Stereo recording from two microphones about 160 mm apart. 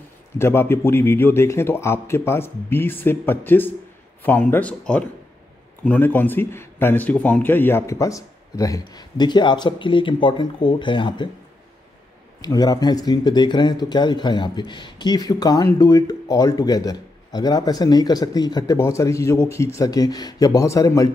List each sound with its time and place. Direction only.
0.4 s a man's voice: 15° left (ahead or behind)
12.4 s speech: 25° left (ahead or behind)